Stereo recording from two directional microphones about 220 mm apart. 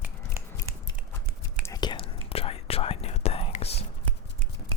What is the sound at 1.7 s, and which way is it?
Whispering, 20° left (ahead or behind).